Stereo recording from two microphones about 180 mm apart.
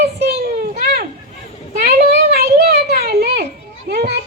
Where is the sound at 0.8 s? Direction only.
60° right (ahead or behind).